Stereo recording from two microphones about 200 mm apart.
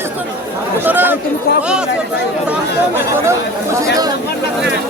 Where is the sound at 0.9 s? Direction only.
10° right (ahead or behind).